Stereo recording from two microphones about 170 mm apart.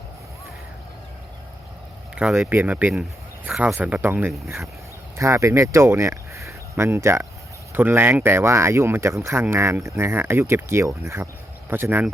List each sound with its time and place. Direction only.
2.1 s speech: 5° right (ahead or behind)